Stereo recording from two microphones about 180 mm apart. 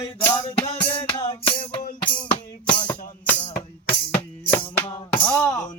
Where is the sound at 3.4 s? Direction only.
25° left (ahead or behind).